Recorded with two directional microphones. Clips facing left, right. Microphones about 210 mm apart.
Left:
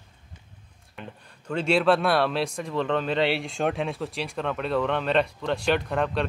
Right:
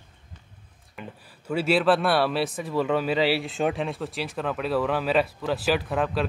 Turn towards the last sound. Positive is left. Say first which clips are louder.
# even
turn(degrees=-5)  # may be behind; listen again after turning